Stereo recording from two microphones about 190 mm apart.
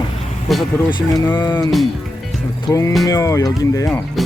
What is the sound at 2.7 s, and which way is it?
Speech, 15° left (ahead or behind).